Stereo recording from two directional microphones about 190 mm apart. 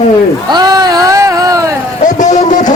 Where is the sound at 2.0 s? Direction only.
40° left (ahead or behind).